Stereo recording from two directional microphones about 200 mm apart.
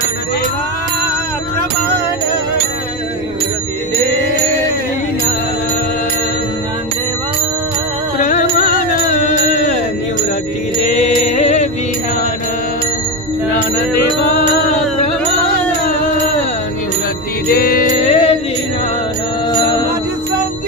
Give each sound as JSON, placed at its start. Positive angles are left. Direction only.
{"t": 8.2, "sound": "music", "side_deg": 40}
{"t": 11.3, "sound": "music", "side_deg": 35}
{"t": 17.5, "sound": "music", "side_deg": 50}
{"t": 19.5, "sound": "music", "side_deg": 20}